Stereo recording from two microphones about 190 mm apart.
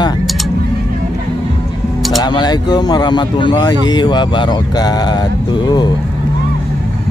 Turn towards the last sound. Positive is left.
turn(degrees=20)  # may be behind; listen again after turning